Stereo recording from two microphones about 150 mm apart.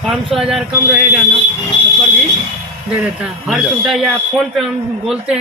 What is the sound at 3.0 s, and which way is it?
Speech, 5° right (ahead or behind).